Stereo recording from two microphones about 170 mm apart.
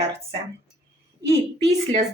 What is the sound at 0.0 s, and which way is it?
Speech, 35° right (ahead or behind).